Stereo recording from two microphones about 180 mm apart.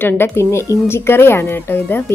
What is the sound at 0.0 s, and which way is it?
A woman's voice, 10° left (ahead or behind).